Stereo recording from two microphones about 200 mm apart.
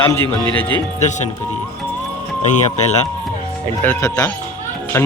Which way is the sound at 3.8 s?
15° left (ahead or behind).